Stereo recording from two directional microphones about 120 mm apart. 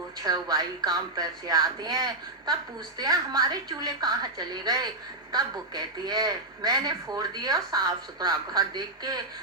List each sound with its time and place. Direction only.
0.2 s a man's voice: 30° right (ahead or behind)